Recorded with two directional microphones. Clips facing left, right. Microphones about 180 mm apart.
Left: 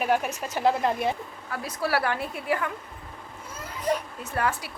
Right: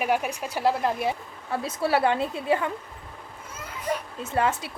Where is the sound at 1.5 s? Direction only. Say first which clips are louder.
Right 3 dB; 25° right (ahead or behind).